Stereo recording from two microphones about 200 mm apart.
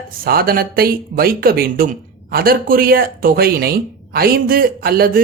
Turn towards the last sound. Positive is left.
turn(degrees=-50)  # may be behind; listen again after turning